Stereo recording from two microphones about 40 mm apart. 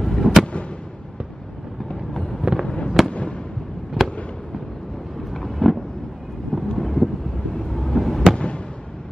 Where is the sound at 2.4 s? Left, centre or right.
Centre.